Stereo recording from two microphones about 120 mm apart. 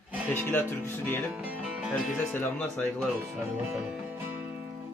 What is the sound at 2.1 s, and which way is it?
Speech, 15° left (ahead or behind).